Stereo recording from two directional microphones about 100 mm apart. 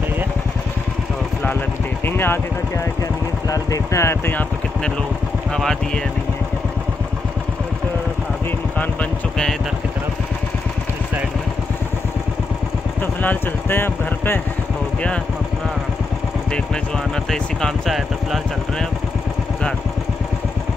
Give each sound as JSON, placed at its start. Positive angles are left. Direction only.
{"t": 2.0, "sound": "speech", "side_deg": 20}
{"t": 3.4, "sound": "speech", "side_deg": 35}
{"t": 5.5, "sound": "speech", "side_deg": 5}
{"t": 13.0, "sound": "speech", "side_deg": 20}
{"t": 16.5, "sound": "speech", "side_deg": 5}